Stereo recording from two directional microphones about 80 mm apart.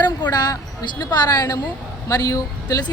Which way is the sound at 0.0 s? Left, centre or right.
Left.